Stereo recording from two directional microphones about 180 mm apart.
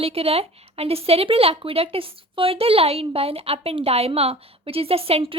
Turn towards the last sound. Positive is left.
turn(degrees=-30)  # may be behind; listen again after turning